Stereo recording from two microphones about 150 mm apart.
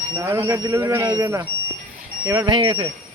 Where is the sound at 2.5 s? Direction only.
30° right (ahead or behind).